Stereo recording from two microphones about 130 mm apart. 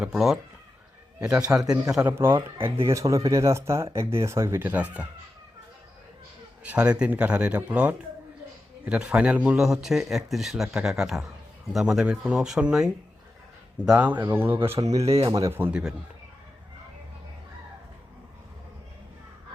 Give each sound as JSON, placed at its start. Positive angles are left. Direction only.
{"t": 0.0, "sound": "speech", "side_deg": -5}
{"t": 2.1, "sound": "speech", "side_deg": -15}
{"t": 6.6, "sound": "a man's voice", "side_deg": -10}
{"t": 14.8, "sound": "speech", "side_deg": -25}
{"t": 15.7, "sound": "speech", "side_deg": -5}